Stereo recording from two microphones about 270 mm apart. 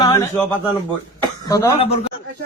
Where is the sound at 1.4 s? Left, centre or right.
Centre.